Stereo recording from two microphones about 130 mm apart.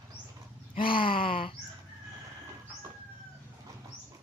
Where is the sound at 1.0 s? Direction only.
45° left (ahead or behind).